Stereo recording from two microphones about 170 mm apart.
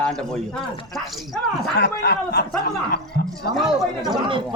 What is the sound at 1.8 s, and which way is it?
Speech, 70° left (ahead or behind).